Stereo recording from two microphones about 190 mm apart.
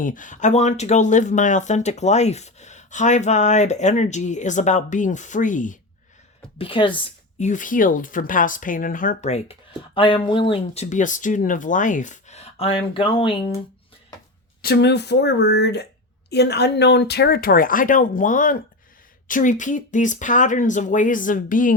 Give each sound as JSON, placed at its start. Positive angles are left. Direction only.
{"t": 0.0, "sound": "speech", "side_deg": 45}
{"t": 6.6, "sound": "a woman's voice", "side_deg": 25}
{"t": 7.3, "sound": "speech", "side_deg": 40}
{"t": 14.6, "sound": "speech", "side_deg": 60}